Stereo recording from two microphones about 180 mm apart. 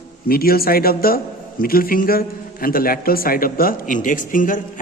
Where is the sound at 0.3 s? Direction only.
55° left (ahead or behind).